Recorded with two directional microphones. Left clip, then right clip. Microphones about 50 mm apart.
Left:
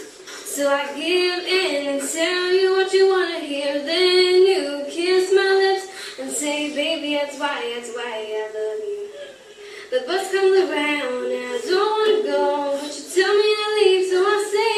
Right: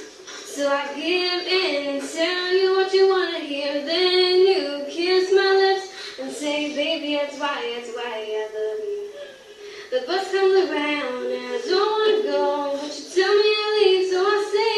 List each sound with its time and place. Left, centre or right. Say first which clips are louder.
0.6 s a woman's voice: left 2 dB; left
2.0 s female singing: left 2 dB; left
6.4 s a woman's voice: left 1 dB; left
9.9 s speech: left 1 dB; left
12.7 s female singing: left 2 dB; left